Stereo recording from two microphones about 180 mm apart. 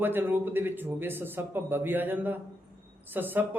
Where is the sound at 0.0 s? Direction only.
10° right (ahead or behind).